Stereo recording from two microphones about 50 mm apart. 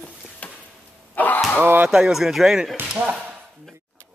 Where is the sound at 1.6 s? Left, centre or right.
Right.